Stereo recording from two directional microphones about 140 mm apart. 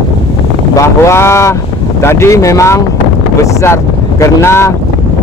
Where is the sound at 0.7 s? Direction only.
20° left (ahead or behind).